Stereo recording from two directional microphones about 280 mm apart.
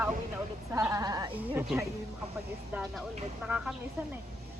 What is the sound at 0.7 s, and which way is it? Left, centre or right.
Speech, centre.